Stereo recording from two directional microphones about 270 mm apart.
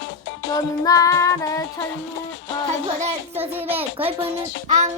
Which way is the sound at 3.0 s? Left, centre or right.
Right.